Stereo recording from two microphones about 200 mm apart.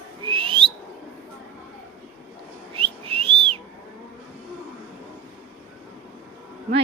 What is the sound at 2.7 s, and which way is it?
Whistling, 30° right (ahead or behind).